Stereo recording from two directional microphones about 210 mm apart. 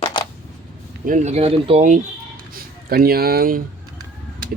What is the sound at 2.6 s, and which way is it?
Speech, 45° right (ahead or behind).